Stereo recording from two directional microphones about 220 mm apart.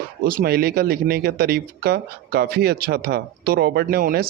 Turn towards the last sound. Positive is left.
turn(degrees=-45)  # may be behind; listen again after turning